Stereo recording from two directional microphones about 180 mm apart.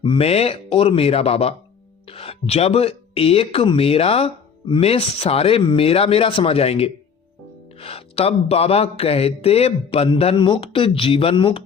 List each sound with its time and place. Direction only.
0.0 s speech: 30° left (ahead or behind)